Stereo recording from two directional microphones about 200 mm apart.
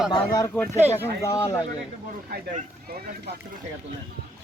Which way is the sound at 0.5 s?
5° left (ahead or behind).